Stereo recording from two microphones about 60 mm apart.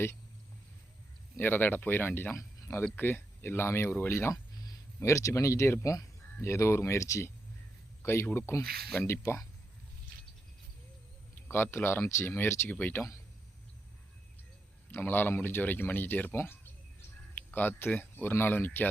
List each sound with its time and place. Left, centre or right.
1.4 s speech: left
2.3 s speech: left
2.8 s speech: left
4.5 s a sound: left
4.9 s speech: left
11.3 s speech: left
12.7 s speech: left
14.8 s speech: left